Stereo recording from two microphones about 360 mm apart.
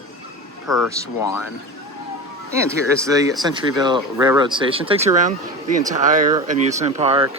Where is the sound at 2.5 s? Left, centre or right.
Centre.